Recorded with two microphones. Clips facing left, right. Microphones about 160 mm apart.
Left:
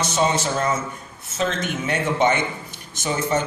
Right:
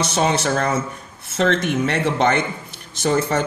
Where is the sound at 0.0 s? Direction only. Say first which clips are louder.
Right 2 dB; 65° right (ahead or behind).